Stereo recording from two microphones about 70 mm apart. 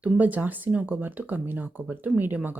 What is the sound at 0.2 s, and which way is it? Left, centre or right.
Speech, right.